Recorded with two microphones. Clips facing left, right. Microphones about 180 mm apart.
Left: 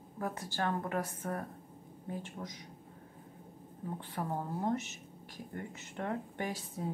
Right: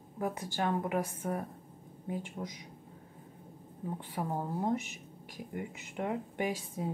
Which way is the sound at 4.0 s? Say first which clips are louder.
Right 1 dB; 10° right (ahead or behind).